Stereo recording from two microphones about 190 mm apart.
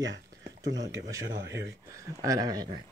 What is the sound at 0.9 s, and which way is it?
Speech, 15° right (ahead or behind).